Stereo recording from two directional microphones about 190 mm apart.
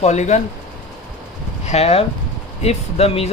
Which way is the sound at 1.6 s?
35° left (ahead or behind).